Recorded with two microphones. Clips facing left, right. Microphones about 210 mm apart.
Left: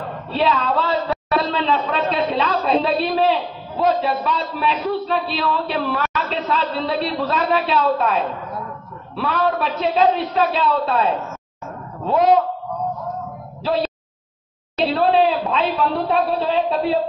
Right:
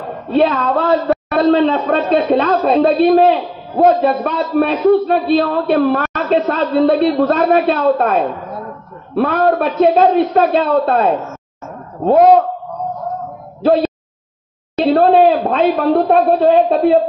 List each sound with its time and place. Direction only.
0.3 s a man's voice: 50° right (ahead or behind)
13.6 s a man's voice: 50° right (ahead or behind)